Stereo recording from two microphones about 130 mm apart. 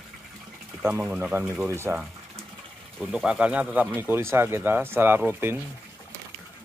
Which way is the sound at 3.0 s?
5° right (ahead or behind).